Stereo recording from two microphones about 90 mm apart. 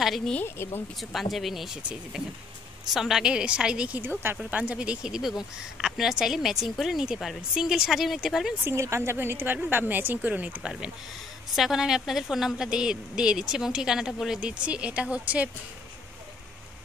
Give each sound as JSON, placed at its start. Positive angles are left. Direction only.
{"t": 0.0, "sound": "speech", "side_deg": 0}
{"t": 0.6, "sound": "speech", "side_deg": 25}
{"t": 1.1, "sound": "a woman's voice", "side_deg": 0}
{"t": 8.6, "sound": "a woman's voice", "side_deg": -30}
{"t": 11.5, "sound": "a woman's voice", "side_deg": -5}